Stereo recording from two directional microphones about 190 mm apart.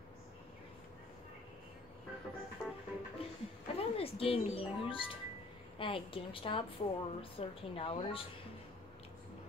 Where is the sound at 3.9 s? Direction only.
30° left (ahead or behind).